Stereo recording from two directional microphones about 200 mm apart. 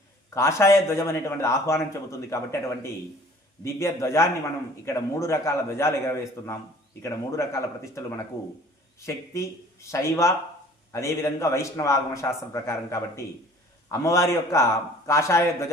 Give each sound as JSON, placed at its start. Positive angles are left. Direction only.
{"t": 0.3, "sound": "a man's voice", "side_deg": 15}